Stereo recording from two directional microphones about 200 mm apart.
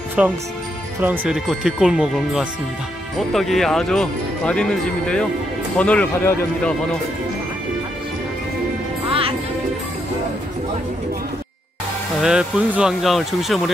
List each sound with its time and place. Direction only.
0.2 s speech: 5° right (ahead or behind)
12.2 s speech: 5° right (ahead or behind)